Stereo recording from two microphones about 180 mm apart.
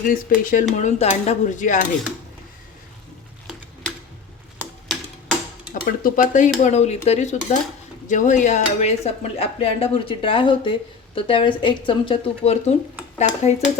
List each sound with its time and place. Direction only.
0.1 s speech: 50° left (ahead or behind)
5.7 s speech: 50° left (ahead or behind)
6.6 s dishes: 40° left (ahead or behind)